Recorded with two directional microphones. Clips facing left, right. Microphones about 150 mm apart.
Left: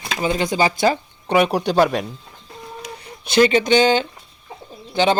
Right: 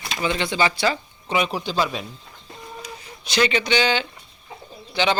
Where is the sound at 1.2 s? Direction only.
60° left (ahead or behind).